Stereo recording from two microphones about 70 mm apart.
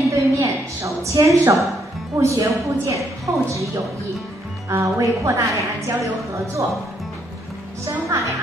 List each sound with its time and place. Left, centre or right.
0.1 s a sound: right
2.1 s a woman's voice: right
7.8 s a woman's voice: right